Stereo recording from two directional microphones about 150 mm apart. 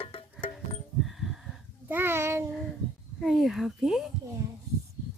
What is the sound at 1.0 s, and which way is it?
Music, centre (ahead or behind).